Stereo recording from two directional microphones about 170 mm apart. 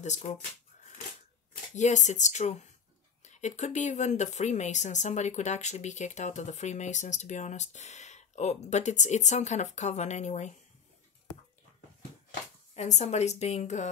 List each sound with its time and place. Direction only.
0.0 s speech: 45° left (ahead or behind)
1.7 s speech: 45° left (ahead or behind)
12.7 s a woman's voice: 40° left (ahead or behind)